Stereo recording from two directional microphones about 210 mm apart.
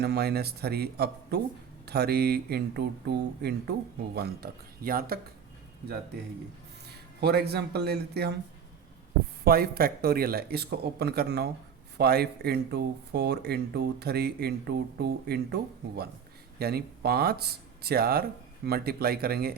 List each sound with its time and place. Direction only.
0.0 s speech: 50° right (ahead or behind)
7.2 s speech: 50° right (ahead or behind)
9.4 s speech: 45° right (ahead or behind)
16.6 s speech: 50° right (ahead or behind)